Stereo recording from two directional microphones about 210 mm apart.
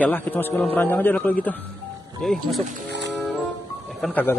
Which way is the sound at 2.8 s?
55° right (ahead or behind).